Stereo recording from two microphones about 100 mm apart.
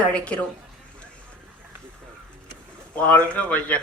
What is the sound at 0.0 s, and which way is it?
Speech, 10° left (ahead or behind).